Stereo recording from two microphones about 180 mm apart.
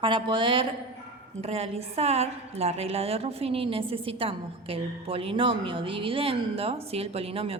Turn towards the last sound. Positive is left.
turn(degrees=-35)  # may be behind; listen again after turning